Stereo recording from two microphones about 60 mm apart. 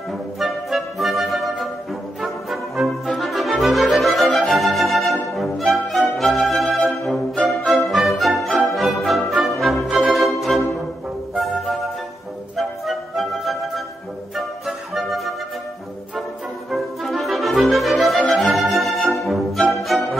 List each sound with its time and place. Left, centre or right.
0.4 s music: centre
11.3 s flute: centre
12.5 s music: centre
16.7 s music: centre